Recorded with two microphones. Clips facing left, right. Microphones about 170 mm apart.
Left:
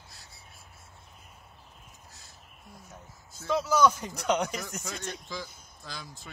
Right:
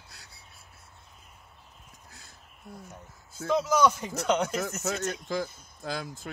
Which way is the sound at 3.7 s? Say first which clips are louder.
Left 2 dB; 10° right (ahead or behind).